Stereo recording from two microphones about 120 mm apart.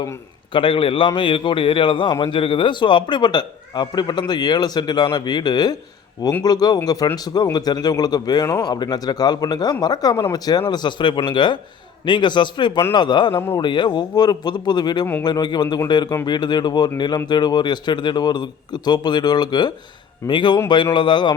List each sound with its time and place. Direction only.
0.5 s a man's voice: 45° left (ahead or behind)